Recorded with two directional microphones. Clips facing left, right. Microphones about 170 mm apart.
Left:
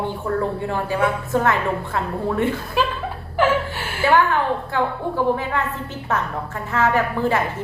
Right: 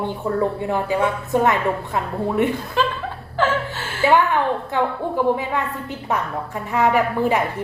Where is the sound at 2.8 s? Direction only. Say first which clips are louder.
Even; 10° left (ahead or behind).